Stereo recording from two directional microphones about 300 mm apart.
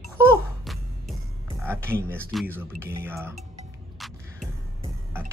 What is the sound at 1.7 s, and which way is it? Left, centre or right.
Speech, centre.